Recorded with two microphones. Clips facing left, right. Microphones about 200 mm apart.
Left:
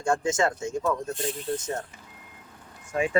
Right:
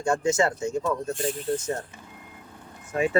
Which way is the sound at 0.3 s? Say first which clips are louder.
Right 4 dB; 10° right (ahead or behind).